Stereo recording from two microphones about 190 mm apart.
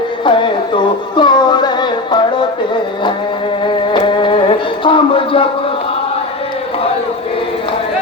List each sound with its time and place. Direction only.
0.3 s music: 25° left (ahead or behind)
3.9 s music: 25° left (ahead or behind)